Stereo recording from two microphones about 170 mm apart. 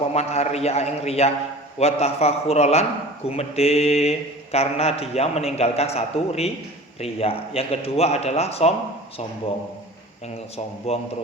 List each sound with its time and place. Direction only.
0.1 s a man's voice: 40° left (ahead or behind)
10.9 s a man's voice: 35° left (ahead or behind)